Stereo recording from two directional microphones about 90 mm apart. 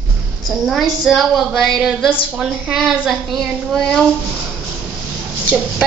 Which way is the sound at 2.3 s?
5° right (ahead or behind).